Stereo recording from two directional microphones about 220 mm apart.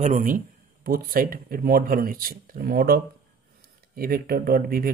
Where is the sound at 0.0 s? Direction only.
35° right (ahead or behind).